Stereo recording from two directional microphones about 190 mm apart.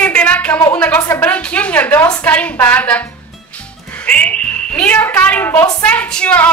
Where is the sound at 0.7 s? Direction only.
10° left (ahead or behind).